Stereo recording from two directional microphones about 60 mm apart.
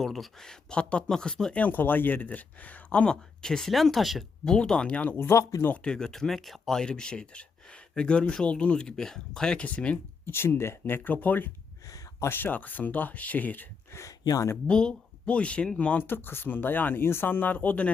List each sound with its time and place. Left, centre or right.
0.0 s speech: centre
1.5 s speech: left
3.4 s speech: centre
4.4 s speech: centre
5.1 s speech: left
5.4 s speech: left
5.8 s speech: centre
10.2 s speech: left
13.9 s speech: left
14.7 s speech: centre
16.0 s speech: left